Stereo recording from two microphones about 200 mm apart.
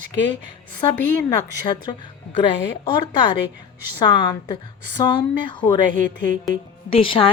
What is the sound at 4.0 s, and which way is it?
A woman's voice, 20° left (ahead or behind).